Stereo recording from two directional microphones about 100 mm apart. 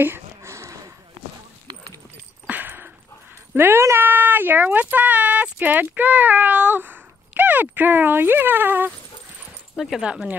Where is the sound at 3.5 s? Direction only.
20° right (ahead or behind).